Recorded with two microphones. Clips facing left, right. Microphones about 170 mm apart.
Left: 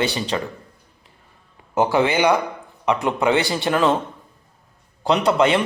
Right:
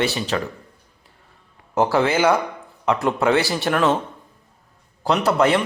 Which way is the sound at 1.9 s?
Centre (ahead or behind).